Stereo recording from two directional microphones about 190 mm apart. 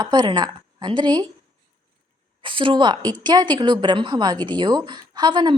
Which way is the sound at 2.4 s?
25° right (ahead or behind).